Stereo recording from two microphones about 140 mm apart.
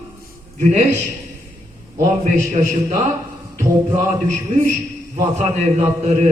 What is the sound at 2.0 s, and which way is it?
Speech, 60° right (ahead or behind).